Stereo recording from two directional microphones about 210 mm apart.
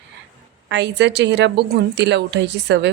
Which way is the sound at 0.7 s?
55° right (ahead or behind).